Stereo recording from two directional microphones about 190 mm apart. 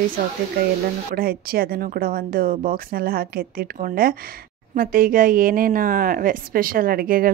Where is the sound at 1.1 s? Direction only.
50° right (ahead or behind).